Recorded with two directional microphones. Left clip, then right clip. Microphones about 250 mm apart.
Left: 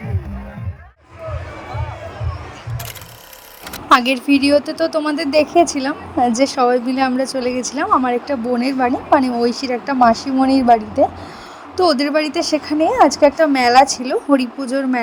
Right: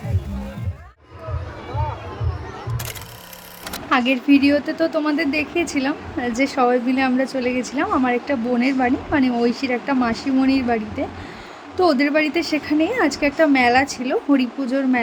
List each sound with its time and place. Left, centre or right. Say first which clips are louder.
3.8 s a woman's voice: left 5 dB; left